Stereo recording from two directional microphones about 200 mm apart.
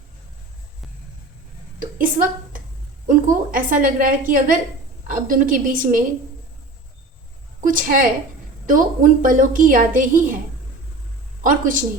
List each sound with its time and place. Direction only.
2.0 s a woman's voice: 45° right (ahead or behind)
7.7 s a woman's voice: 40° right (ahead or behind)
11.4 s a woman's voice: 40° right (ahead or behind)